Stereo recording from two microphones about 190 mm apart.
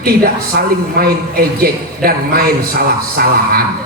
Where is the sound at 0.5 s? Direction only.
55° right (ahead or behind).